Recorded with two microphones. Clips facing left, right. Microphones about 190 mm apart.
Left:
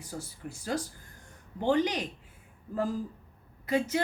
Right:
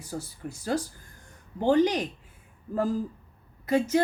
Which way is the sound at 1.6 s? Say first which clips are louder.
Right 5 dB; 40° right (ahead or behind).